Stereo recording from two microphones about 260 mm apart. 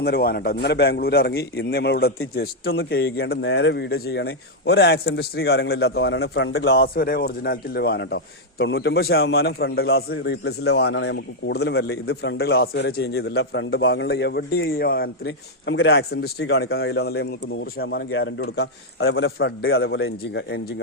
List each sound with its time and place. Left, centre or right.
0.0 s speech: left